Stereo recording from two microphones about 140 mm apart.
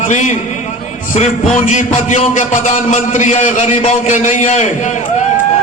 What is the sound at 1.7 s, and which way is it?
A man's voice, 60° left (ahead or behind).